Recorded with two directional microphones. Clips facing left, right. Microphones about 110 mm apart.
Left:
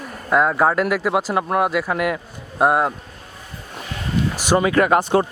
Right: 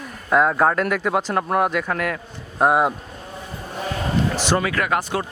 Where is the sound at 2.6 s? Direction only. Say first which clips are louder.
Even; centre (ahead or behind).